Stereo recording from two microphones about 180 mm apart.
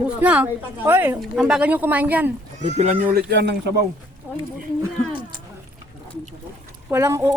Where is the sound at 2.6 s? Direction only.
40° right (ahead or behind).